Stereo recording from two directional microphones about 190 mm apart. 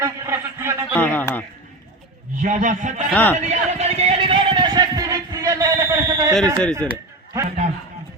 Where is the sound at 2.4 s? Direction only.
40° right (ahead or behind).